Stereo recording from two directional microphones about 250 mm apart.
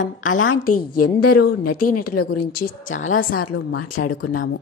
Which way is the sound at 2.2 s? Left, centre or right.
Left.